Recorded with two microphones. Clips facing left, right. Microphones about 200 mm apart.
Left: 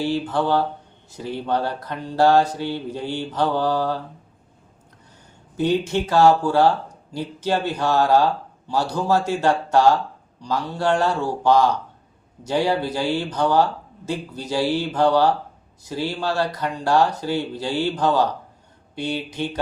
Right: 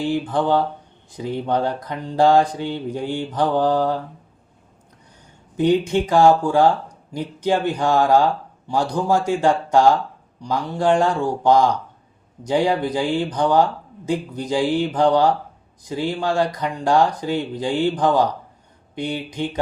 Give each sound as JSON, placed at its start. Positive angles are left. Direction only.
{"t": 0.0, "sound": "speech", "side_deg": -15}
{"t": 5.5, "sound": "speech", "side_deg": -15}